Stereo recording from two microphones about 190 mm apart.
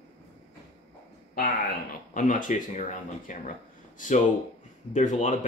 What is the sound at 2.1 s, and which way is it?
Speech, 40° left (ahead or behind).